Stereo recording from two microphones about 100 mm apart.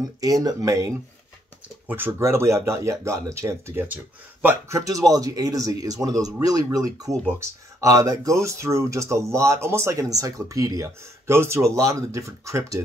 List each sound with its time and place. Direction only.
0.2 s speech: 35° right (ahead or behind)
1.9 s speech: 20° right (ahead or behind)
4.6 s speech: 35° right (ahead or behind)